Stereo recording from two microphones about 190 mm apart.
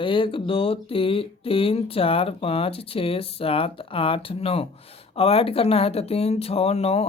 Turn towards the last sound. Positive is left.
turn(degrees=35)  # may be behind; listen again after turning